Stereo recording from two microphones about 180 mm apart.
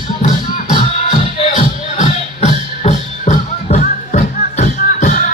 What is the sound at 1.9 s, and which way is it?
Music, 40° left (ahead or behind).